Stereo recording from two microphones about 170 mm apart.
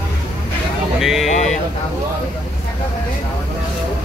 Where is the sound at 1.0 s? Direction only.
Centre (ahead or behind).